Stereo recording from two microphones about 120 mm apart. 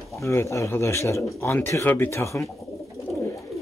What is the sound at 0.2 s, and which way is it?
A man's voice, 25° left (ahead or behind).